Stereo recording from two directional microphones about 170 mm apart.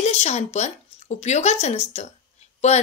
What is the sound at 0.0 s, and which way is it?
A woman's voice, 40° left (ahead or behind).